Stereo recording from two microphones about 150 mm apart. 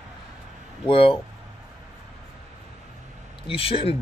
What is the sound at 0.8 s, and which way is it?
Speech, 35° left (ahead or behind).